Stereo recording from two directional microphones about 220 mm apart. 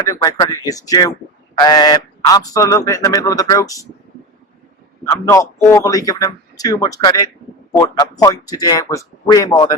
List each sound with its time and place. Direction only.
0.0 s a man's voice: 15° left (ahead or behind)
5.0 s a man's voice: 15° left (ahead or behind)